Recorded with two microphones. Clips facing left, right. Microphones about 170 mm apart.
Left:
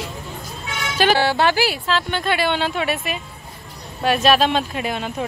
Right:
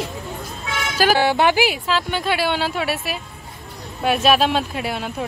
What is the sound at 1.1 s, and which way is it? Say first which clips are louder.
Speech: right 1 dB; 15° right (ahead or behind).